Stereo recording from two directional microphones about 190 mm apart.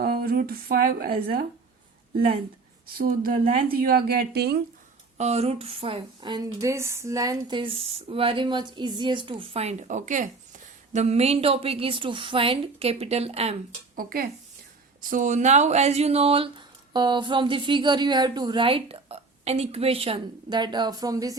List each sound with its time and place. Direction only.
0.0 s speech: 55° right (ahead or behind)
2.8 s speech: 50° right (ahead or behind)
5.1 s speech: 35° right (ahead or behind)
13.9 s speech: 50° right (ahead or behind); by 21.3 s 20° right (ahead or behind)